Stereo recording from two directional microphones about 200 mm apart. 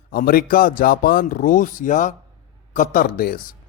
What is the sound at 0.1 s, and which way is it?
A man's voice, 50° left (ahead or behind).